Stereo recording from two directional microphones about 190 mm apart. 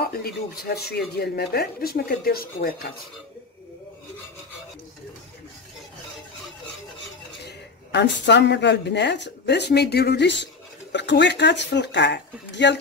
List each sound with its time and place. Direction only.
0.0 s speech: 55° left (ahead or behind)
7.4 s a woman's voice: 65° left (ahead or behind)